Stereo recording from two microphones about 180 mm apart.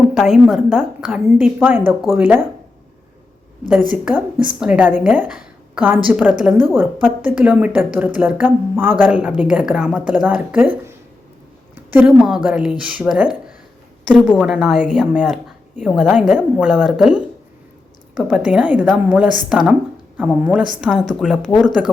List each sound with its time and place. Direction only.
0.1 s a woman's voice: centre (ahead or behind)
3.7 s a woman's voice: 10° right (ahead or behind)
11.9 s a woman's voice: 5° right (ahead or behind)
14.3 s a woman's voice: centre (ahead or behind)